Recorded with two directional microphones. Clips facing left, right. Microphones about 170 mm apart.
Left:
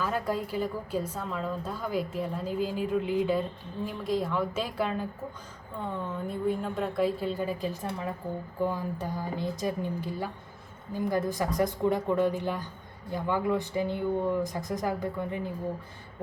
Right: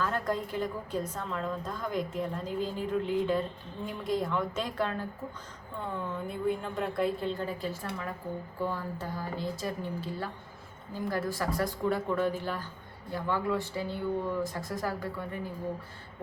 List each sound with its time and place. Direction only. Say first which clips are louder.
0.0 s a woman's voice: left 1 dB; 10° left (ahead or behind)
5.8 s a woman's voice: left 2 dB; centre (ahead or behind); by 15.4 s 20° left (ahead or behind)